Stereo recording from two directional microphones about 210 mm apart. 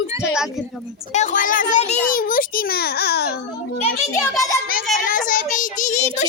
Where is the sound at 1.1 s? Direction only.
35° left (ahead or behind).